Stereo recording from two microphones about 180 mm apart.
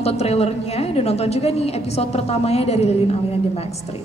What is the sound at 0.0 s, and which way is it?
A woman's voice, 35° left (ahead or behind).